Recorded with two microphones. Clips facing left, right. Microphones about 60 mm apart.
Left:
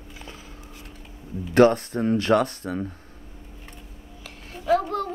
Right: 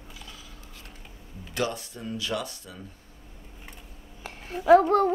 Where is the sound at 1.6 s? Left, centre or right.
Left.